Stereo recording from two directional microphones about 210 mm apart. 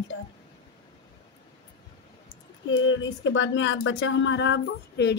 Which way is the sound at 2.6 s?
65° left (ahead or behind).